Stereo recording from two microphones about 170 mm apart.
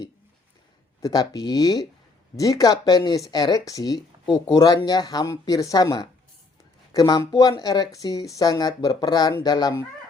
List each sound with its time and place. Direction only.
1.0 s speech: 20° left (ahead or behind)